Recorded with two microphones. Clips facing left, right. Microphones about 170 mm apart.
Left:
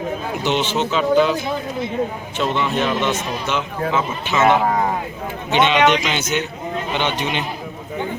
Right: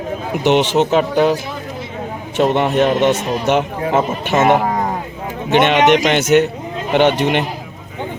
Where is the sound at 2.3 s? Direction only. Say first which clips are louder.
Right 7 dB; 60° right (ahead or behind).